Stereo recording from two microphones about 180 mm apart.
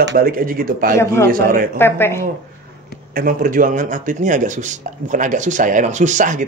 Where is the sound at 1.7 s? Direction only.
10° left (ahead or behind).